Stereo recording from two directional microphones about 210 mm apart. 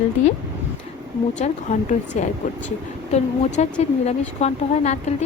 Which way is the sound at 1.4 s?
35° left (ahead or behind).